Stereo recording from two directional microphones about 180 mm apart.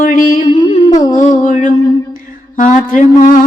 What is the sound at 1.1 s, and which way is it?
Music, 45° left (ahead or behind).